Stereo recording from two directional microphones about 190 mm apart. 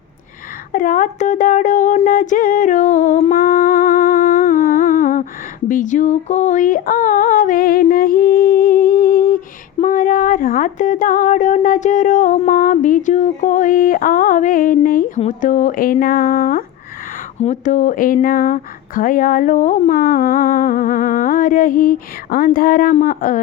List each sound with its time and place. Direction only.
0.7 s speech: 45° left (ahead or behind)
3.3 s humming: 45° left (ahead or behind)
5.6 s a sound: 40° left (ahead or behind)
9.8 s speech: 45° left (ahead or behind)